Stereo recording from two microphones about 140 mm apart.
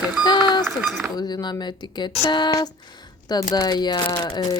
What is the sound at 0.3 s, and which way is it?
Cowbell, 30° left (ahead or behind).